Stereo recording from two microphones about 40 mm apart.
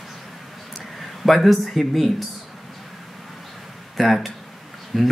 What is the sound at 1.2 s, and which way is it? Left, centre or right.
Speech, centre.